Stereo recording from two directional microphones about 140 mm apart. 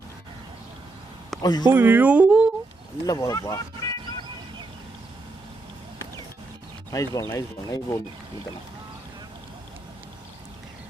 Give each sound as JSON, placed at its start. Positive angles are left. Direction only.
{"t": 1.4, "sound": "speech", "side_deg": 30}
{"t": 1.7, "sound": "speech", "side_deg": -15}
{"t": 3.1, "sound": "speech", "side_deg": 25}
{"t": 6.9, "sound": "speech", "side_deg": 25}